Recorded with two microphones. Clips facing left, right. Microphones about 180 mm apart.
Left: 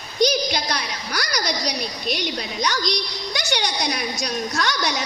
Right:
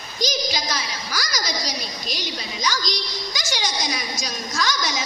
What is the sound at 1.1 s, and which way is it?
A woman's voice, 65° left (ahead or behind).